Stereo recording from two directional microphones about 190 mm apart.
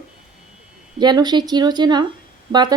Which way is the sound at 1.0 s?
20° right (ahead or behind).